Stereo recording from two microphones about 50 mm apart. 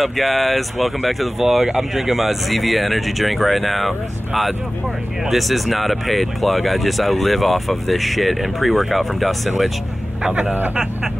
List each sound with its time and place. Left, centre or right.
0.0 s speech: centre
10.2 s a man's voice: right